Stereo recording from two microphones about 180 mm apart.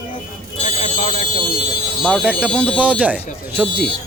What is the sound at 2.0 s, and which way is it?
A man's voice, centre (ahead or behind).